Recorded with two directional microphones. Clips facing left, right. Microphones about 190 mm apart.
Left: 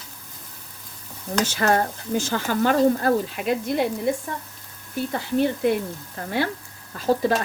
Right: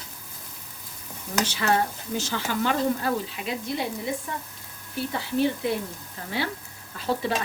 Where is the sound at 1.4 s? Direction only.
45° left (ahead or behind).